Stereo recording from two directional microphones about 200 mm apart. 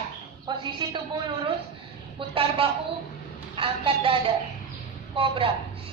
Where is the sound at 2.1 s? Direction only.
25° right (ahead or behind).